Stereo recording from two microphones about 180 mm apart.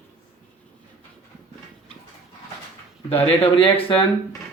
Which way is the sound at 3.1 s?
30° left (ahead or behind).